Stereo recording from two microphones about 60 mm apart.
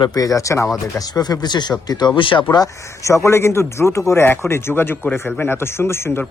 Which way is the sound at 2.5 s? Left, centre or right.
Left.